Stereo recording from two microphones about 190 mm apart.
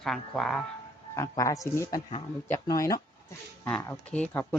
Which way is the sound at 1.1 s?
15° left (ahead or behind).